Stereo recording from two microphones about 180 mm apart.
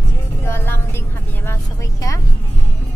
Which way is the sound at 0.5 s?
15° left (ahead or behind).